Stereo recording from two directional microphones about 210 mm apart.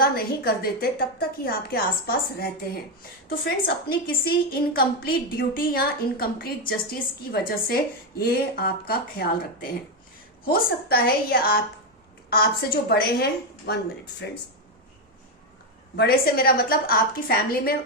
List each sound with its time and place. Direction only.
0.0 s a woman's voice: 45° left (ahead or behind)
10.4 s a woman's voice: 45° left (ahead or behind)
16.0 s a woman's voice: 45° left (ahead or behind)